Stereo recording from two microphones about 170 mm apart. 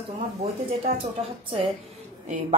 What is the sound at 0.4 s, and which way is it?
Speech, 35° right (ahead or behind).